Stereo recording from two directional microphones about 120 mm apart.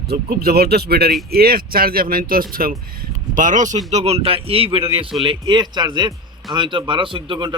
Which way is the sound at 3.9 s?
60° right (ahead or behind).